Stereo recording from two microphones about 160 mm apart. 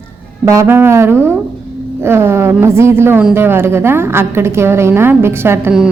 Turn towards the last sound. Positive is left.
turn(degrees=-15)  # may be behind; listen again after turning